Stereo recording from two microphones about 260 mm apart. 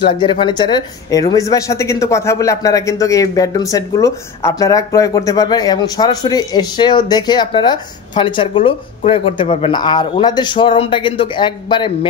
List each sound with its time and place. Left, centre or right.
0.0 s speech: centre